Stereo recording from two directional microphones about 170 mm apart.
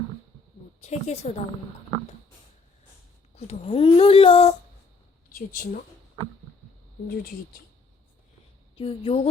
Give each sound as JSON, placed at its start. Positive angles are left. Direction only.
{"t": 0.8, "sound": "speech", "side_deg": 40}
{"t": 3.3, "sound": "speech", "side_deg": 40}
{"t": 5.3, "sound": "speech", "side_deg": 55}
{"t": 8.7, "sound": "a woman's voice", "side_deg": 30}